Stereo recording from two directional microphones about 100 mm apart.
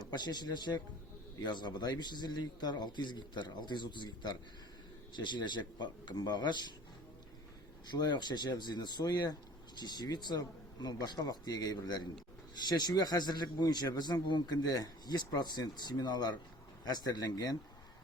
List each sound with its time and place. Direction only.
0.1 s a man's voice: 45° left (ahead or behind)
7.9 s a man's voice: 45° left (ahead or behind)